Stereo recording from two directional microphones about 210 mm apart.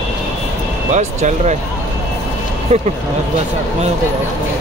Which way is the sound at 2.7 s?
30° right (ahead or behind).